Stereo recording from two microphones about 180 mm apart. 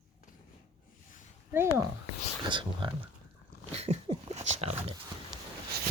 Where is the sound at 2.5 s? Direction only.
25° right (ahead or behind).